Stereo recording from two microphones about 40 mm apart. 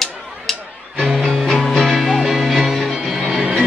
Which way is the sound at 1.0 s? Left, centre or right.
Centre.